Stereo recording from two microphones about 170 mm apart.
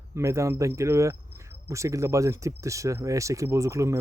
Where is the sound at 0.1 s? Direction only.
15° right (ahead or behind).